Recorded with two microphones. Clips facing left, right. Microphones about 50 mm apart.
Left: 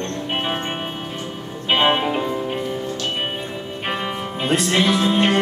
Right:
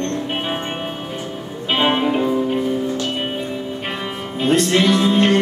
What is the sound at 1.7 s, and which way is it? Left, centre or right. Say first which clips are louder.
Music: right 1 dB; centre.